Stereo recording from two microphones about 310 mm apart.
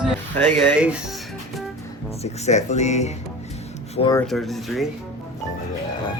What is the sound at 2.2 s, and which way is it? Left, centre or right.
Speech, left.